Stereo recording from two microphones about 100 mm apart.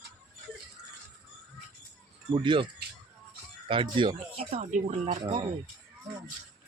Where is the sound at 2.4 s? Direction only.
55° right (ahead or behind).